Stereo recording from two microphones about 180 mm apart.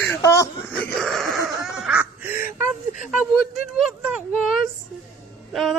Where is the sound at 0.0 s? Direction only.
15° left (ahead or behind).